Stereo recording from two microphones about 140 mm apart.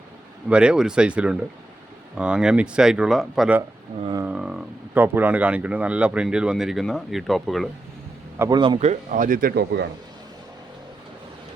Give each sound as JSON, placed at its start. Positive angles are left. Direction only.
{"t": 0.4, "sound": "speech", "side_deg": -5}
{"t": 8.4, "sound": "a man's voice", "side_deg": -30}
{"t": 8.8, "sound": "speech", "side_deg": -60}